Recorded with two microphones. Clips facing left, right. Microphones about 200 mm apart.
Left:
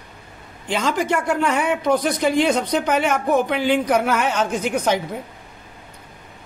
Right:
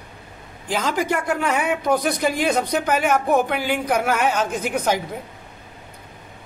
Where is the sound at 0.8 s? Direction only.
5° right (ahead or behind).